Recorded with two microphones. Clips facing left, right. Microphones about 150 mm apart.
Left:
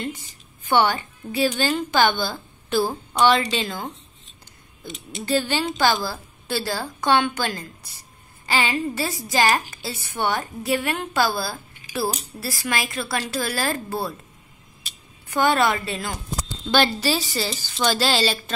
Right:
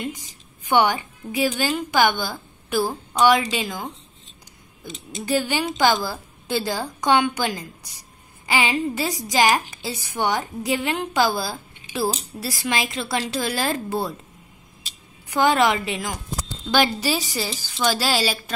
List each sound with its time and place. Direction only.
0.0 s a woman's voice: 15° right (ahead or behind)
15.2 s a woman's voice: 15° right (ahead or behind)